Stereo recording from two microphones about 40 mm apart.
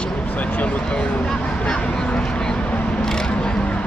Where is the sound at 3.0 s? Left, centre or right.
Centre.